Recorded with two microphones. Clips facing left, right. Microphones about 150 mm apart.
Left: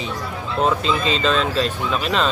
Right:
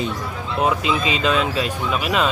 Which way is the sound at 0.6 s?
10° right (ahead or behind).